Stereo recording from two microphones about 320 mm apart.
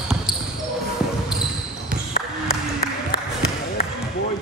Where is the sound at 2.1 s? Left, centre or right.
Left.